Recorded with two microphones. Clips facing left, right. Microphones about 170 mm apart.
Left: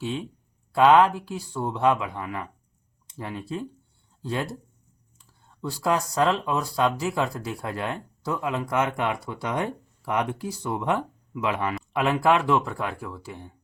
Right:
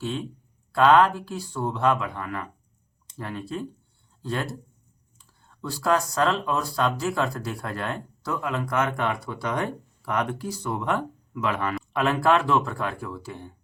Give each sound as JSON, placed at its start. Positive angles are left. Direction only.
{"t": 0.0, "sound": "speech", "side_deg": 15}
{"t": 5.8, "sound": "speech", "side_deg": 15}